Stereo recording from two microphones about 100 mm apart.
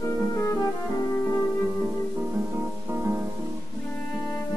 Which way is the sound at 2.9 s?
30° right (ahead or behind).